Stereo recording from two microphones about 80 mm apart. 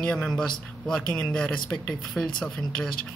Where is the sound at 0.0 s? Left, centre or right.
Centre.